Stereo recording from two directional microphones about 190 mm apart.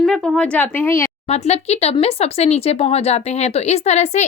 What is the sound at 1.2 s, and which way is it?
Speech, 35° left (ahead or behind).